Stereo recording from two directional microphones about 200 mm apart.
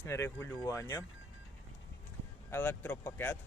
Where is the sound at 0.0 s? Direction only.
10° left (ahead or behind).